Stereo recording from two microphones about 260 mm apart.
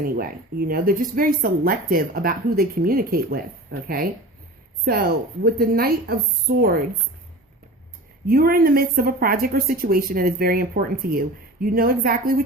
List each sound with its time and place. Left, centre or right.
0.0 s speech: right
8.3 s speech: right